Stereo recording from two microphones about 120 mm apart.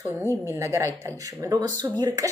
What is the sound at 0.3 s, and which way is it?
Speech, 25° right (ahead or behind).